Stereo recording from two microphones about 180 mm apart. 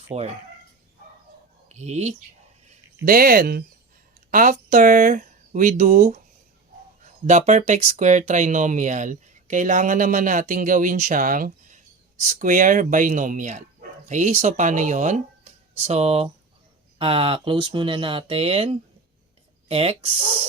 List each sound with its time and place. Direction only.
0.1 s speech: 40° right (ahead or behind)
1.7 s speech: 40° right (ahead or behind)
3.0 s speech: 50° right (ahead or behind)
7.3 s speech: 40° right (ahead or behind)